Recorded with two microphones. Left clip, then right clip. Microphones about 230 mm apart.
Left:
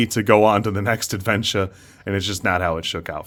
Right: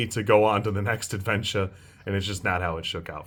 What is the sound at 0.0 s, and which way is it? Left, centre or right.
Speech, left.